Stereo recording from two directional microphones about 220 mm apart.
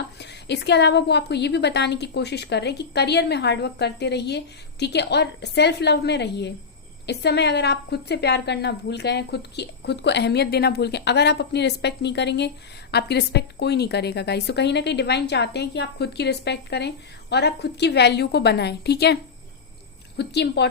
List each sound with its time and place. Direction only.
0.2 s a woman's voice: 50° left (ahead or behind)